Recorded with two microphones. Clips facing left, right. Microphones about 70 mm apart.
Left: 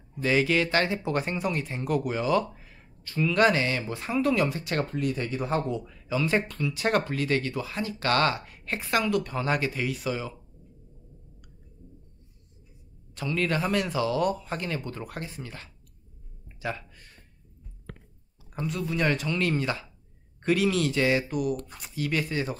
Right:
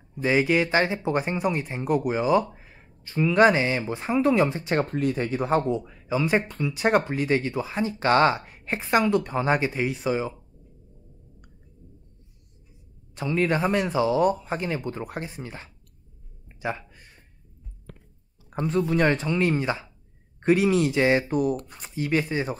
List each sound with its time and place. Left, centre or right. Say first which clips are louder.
0.2 s speech: right 2 dB; right
13.1 s speech: right 4 dB; right
16.4 s a sound: right 3 dB; right
18.5 s speech: right 7 dB; right
19.2 s speech: right 3 dB; right